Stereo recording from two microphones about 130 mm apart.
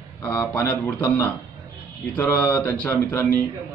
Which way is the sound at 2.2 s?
15° left (ahead or behind).